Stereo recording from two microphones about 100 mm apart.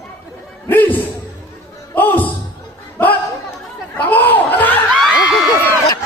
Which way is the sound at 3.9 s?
15° left (ahead or behind).